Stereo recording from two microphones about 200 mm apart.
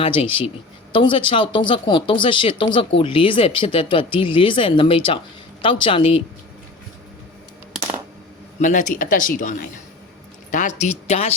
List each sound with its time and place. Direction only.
0.0 s speech: 25° left (ahead or behind)
8.6 s speech: 40° left (ahead or behind)